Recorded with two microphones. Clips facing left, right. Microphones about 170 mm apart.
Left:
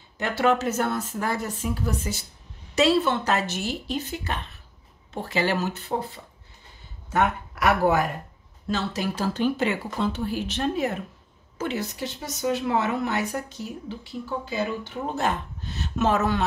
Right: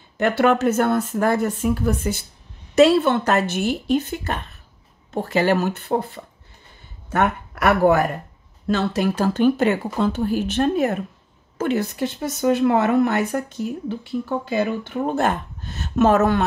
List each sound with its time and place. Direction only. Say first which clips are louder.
0.2 s speech: right 5 dB; 60° right (ahead or behind)